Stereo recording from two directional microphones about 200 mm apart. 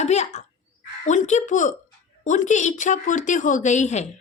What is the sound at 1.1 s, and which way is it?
A woman's voice, 35° left (ahead or behind).